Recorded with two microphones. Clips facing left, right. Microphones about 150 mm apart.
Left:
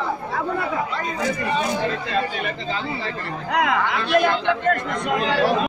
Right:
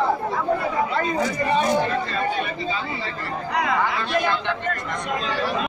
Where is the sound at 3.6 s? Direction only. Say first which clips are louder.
Left 1 dB; 70° left (ahead or behind).